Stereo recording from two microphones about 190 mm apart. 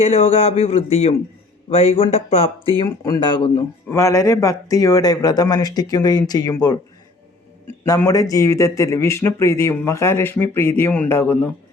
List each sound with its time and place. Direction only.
0.0 s speech: 35° left (ahead or behind)
3.8 s speech: 15° left (ahead or behind)
7.9 s a man's voice: 20° left (ahead or behind)